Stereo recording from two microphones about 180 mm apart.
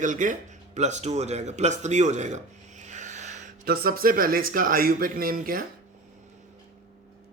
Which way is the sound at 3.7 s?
55° right (ahead or behind).